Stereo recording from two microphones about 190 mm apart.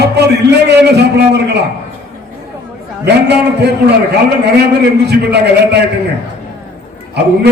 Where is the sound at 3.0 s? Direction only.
60° right (ahead or behind).